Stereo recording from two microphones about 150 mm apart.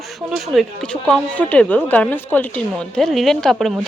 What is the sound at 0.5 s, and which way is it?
Speech, centre (ahead or behind).